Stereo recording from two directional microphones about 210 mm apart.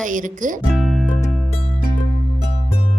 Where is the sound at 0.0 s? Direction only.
40° right (ahead or behind).